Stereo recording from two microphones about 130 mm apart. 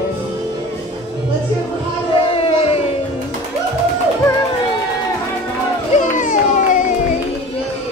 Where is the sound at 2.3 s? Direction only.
50° left (ahead or behind).